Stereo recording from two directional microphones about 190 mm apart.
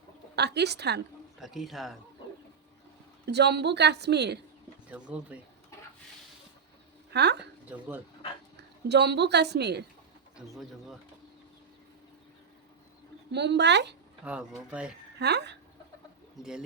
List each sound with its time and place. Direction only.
0.3 s a woman's voice: 60° right (ahead or behind)
1.4 s speech: centre (ahead or behind)
3.2 s a woman's voice: 60° right (ahead or behind)
4.9 s speech: 5° right (ahead or behind)
7.1 s a woman's voice: 60° right (ahead or behind)
7.7 s speech: 10° right (ahead or behind)
8.9 s a woman's voice: 60° right (ahead or behind)
10.3 s speech: centre (ahead or behind)
13.3 s a woman's voice: 65° right (ahead or behind)
14.3 s speech: 5° right (ahead or behind)
15.2 s a woman's voice: 60° right (ahead or behind)
16.4 s speech: 5° right (ahead or behind)